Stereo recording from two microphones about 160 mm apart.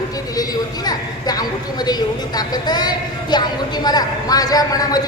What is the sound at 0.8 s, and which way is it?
A man's voice, 25° left (ahead or behind).